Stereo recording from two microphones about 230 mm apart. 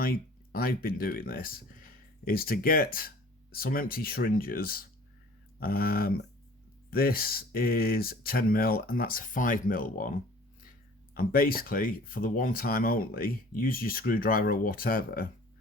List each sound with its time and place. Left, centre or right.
0.0 s speech: left